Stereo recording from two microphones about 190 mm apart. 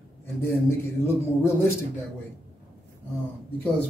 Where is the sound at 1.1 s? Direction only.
15° left (ahead or behind).